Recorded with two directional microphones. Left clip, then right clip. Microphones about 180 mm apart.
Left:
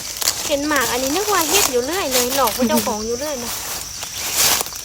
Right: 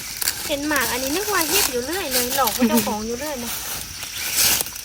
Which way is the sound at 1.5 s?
25° left (ahead or behind).